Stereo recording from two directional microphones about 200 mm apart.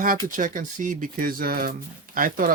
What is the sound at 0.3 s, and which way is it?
Speech, 40° right (ahead or behind).